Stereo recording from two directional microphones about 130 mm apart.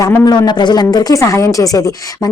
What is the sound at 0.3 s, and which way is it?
A woman's voice, 35° left (ahead or behind).